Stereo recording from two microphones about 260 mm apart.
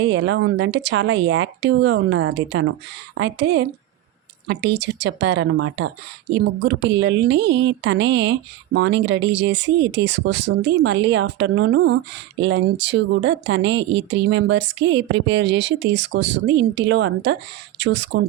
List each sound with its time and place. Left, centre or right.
0.0 s speech: right